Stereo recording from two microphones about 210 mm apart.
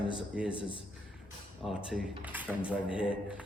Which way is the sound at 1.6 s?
5° right (ahead or behind).